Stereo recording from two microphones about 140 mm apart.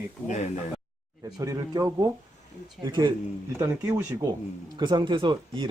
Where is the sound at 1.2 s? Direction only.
25° right (ahead or behind).